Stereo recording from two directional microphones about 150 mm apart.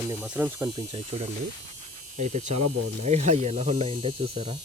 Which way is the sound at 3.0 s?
45° right (ahead or behind).